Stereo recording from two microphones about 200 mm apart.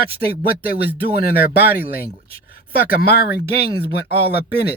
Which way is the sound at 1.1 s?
50° left (ahead or behind).